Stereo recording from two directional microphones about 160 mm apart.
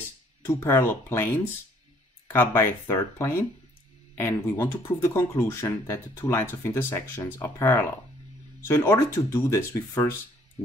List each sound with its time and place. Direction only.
0.5 s speech: 15° left (ahead or behind)